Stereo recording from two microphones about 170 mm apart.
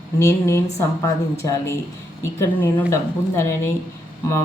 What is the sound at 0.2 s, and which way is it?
Speech, 15° left (ahead or behind).